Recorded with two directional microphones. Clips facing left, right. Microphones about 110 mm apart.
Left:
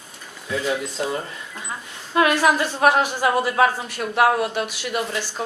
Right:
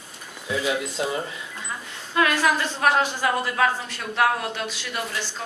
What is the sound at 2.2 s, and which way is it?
A woman's voice, 20° left (ahead or behind).